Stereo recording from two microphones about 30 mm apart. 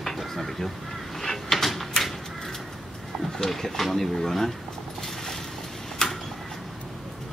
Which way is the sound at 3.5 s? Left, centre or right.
Centre.